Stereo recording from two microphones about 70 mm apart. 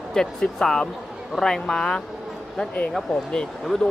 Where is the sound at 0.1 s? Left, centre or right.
Centre.